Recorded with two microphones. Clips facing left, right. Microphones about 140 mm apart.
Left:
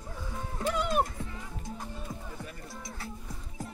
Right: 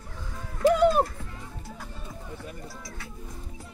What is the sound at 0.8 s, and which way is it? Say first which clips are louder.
Music: right 5 dB; 40° right (ahead or behind).